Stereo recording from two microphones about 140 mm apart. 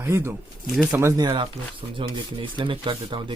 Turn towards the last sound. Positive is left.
turn(degrees=-35)  # may be behind; listen again after turning